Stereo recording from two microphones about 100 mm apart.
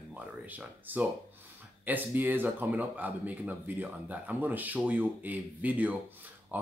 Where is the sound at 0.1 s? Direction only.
15° right (ahead or behind).